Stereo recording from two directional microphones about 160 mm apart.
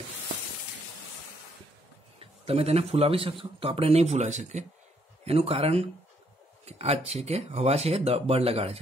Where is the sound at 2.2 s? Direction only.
40° right (ahead or behind).